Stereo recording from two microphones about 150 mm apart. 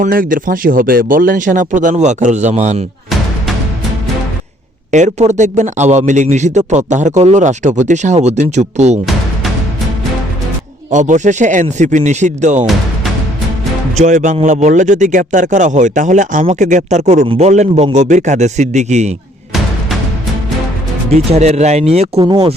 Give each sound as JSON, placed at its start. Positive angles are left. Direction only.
{"t": 0.0, "sound": "speech", "side_deg": -65}
{"t": 4.9, "sound": "speech", "side_deg": -55}
{"t": 10.9, "sound": "speech", "side_deg": -55}
{"t": 13.9, "sound": "speech", "side_deg": -55}
{"t": 21.2, "sound": "speech", "side_deg": -45}
{"t": 22.2, "sound": "speech", "side_deg": -30}